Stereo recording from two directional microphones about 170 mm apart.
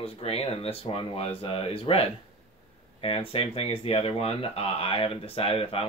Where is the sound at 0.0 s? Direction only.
35° left (ahead or behind).